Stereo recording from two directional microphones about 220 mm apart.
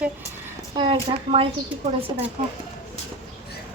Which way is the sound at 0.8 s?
25° right (ahead or behind).